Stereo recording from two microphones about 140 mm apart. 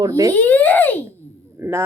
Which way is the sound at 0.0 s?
25° right (ahead or behind).